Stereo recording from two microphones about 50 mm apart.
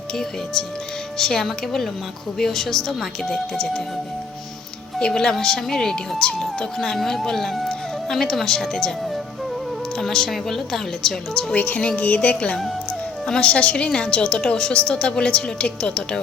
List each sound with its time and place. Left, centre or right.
0.1 s speech: centre
4.9 s speech: centre
10.0 s speech: centre
11.5 s a woman's voice: left